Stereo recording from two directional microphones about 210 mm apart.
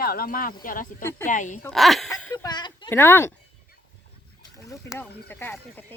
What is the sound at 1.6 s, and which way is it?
Speech, centre (ahead or behind).